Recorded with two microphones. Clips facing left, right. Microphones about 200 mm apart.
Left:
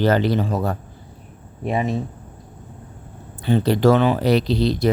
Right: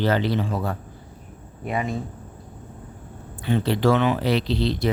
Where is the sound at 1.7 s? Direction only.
25° left (ahead or behind).